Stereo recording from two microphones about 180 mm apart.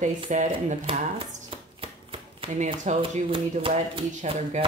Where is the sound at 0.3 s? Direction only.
45° right (ahead or behind).